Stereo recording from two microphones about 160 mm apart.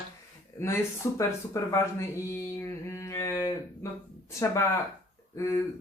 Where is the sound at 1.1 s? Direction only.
20° left (ahead or behind).